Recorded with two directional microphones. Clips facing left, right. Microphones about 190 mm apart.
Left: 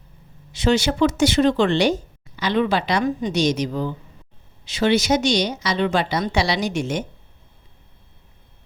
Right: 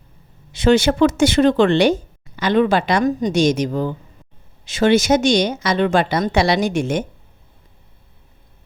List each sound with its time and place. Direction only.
0.5 s speech: 55° right (ahead or behind)